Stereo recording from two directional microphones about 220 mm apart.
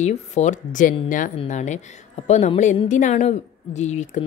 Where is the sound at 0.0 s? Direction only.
30° left (ahead or behind).